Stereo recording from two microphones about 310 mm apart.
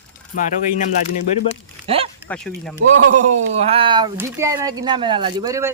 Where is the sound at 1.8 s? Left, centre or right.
Centre.